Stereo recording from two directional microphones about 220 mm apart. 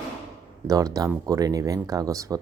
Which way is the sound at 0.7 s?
15° right (ahead or behind).